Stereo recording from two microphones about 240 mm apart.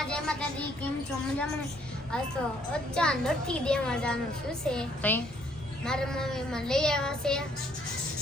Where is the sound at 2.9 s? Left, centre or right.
Centre.